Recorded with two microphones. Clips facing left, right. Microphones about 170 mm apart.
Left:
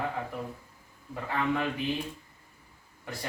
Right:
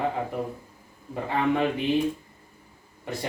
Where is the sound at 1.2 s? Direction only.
25° right (ahead or behind).